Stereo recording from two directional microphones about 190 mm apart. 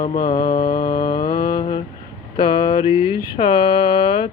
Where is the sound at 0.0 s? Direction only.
50° left (ahead or behind).